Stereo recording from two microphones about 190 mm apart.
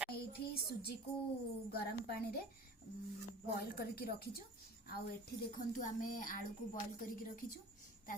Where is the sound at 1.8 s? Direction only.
55° left (ahead or behind).